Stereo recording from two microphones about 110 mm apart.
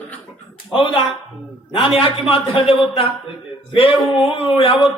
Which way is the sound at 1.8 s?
60° left (ahead or behind).